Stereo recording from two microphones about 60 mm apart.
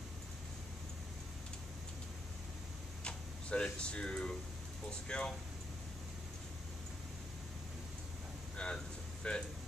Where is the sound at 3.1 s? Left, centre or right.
Centre.